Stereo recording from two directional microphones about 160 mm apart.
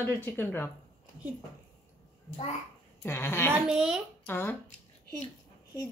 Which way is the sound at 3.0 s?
15° left (ahead or behind).